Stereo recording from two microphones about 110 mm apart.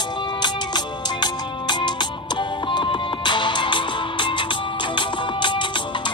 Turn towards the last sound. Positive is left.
turn(degrees=45)  # may be behind; listen again after turning